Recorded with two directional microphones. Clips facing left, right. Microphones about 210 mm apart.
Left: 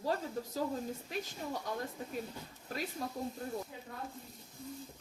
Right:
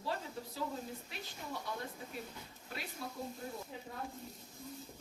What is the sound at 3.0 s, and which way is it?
Speech, 40° left (ahead or behind).